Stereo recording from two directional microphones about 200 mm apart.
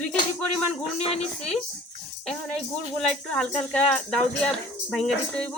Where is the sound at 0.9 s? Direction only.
30° left (ahead or behind).